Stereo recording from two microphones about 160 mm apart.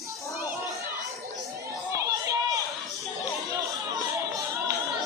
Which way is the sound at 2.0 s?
20° right (ahead or behind).